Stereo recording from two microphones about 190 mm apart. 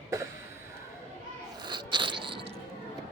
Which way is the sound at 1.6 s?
25° right (ahead or behind).